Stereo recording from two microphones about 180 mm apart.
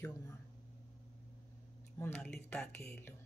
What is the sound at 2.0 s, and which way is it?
Speech, 5° left (ahead or behind).